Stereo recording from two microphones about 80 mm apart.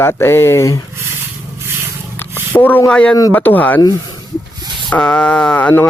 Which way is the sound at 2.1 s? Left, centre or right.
Left.